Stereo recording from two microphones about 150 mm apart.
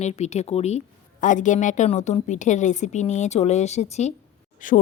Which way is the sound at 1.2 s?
55° left (ahead or behind).